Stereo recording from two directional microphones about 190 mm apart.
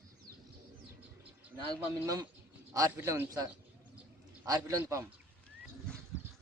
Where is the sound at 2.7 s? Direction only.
15° right (ahead or behind).